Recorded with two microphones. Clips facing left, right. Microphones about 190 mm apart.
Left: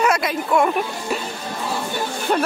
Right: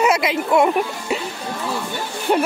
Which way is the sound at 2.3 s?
15° right (ahead or behind).